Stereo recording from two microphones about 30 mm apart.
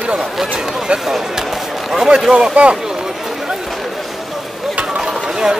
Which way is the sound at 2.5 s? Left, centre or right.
Right.